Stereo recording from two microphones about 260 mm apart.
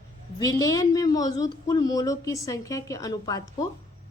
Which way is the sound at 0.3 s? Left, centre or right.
Centre.